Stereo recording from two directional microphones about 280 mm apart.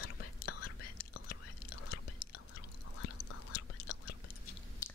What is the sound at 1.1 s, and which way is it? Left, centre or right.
Whispering, left.